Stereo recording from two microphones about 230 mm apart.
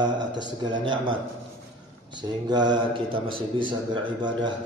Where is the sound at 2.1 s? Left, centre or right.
Centre.